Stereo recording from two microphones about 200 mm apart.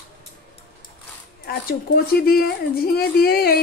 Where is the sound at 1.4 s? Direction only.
50° left (ahead or behind).